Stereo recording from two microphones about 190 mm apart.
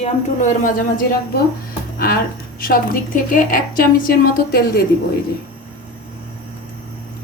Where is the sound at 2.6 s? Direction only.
50° left (ahead or behind).